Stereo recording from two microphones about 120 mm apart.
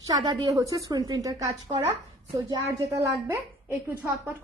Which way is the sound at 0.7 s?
30° right (ahead or behind).